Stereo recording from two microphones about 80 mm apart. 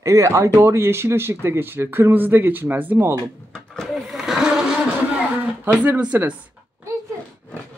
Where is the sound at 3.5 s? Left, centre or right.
Centre.